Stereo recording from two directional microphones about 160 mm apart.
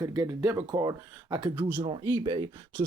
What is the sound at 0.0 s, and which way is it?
Speech, 20° right (ahead or behind).